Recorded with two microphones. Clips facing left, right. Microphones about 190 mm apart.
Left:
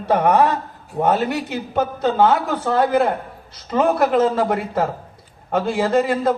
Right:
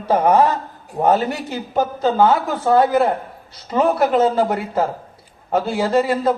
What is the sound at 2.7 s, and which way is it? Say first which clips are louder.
Speech: right 3 dB; 35° right (ahead or behind).